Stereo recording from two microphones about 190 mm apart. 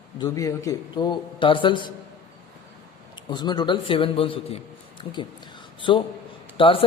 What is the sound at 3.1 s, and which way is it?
A man's voice, 25° left (ahead or behind).